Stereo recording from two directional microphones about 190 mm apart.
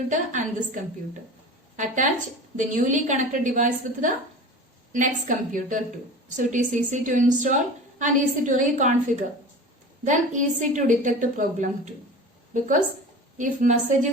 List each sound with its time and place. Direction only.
0.1 s a woman's voice: 40° right (ahead or behind)
13.3 s a woman's voice: 40° right (ahead or behind)